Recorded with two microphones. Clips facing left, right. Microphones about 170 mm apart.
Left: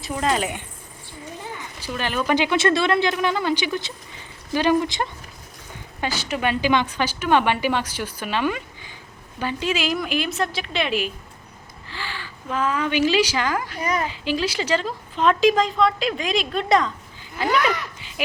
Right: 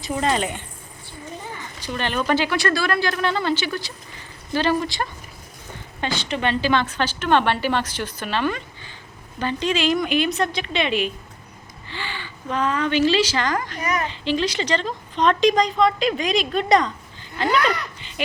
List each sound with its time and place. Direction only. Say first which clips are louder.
0.0 s a woman's voice: right 1 dB; centre (ahead or behind)
1.8 s a woman's voice: right 1 dB; 5° left (ahead or behind)